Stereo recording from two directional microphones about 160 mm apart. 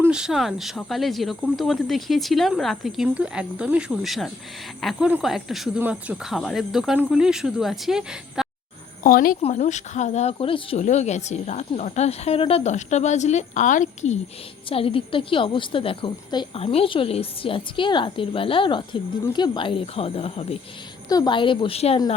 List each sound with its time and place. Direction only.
0.0 s speech: 5° right (ahead or behind)
9.0 s speech: 60° left (ahead or behind)
9.4 s speech: 45° left (ahead or behind)
14.7 s a woman's voice: 35° left (ahead or behind)
21.1 s a woman's voice: 25° left (ahead or behind)